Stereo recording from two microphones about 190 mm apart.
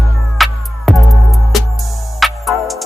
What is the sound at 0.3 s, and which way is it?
Music, centre (ahead or behind).